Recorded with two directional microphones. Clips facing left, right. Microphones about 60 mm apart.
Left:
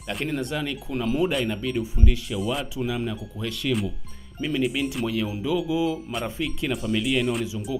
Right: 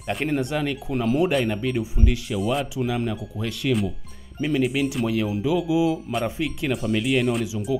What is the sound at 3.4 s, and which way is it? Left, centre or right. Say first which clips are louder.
Speech: right 2 dB; right.